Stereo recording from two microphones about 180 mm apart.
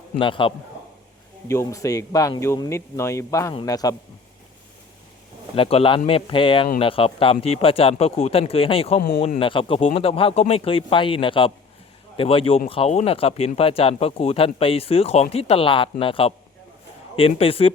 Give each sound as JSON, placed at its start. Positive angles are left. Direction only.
{"t": 0.2, "sound": "speech", "side_deg": 25}
{"t": 1.5, "sound": "speech", "side_deg": 15}
{"t": 5.5, "sound": "speech", "side_deg": 30}
{"t": 9.0, "sound": "speech", "side_deg": 55}
{"t": 9.2, "sound": "speech", "side_deg": 30}